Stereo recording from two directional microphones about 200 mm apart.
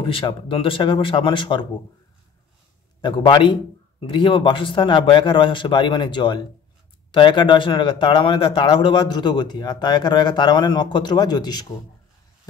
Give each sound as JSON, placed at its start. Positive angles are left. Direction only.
{"t": 0.0, "sound": "speech", "side_deg": 25}
{"t": 3.0, "sound": "speech", "side_deg": 25}